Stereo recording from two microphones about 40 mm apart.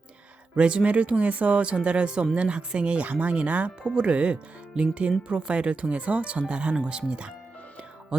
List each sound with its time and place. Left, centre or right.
0.5 s speech: right